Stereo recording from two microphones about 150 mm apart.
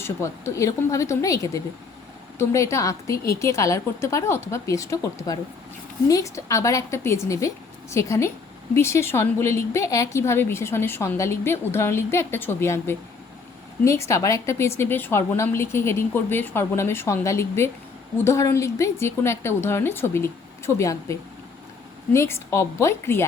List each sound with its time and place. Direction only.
0.0 s a woman's voice: 20° left (ahead or behind)